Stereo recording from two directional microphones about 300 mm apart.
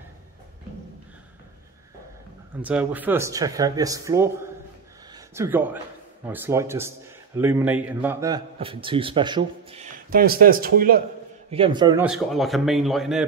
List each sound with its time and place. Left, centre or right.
2.6 s a man's voice: centre; by 11.0 s right
11.5 s a man's voice: centre
12.1 s a man's voice: centre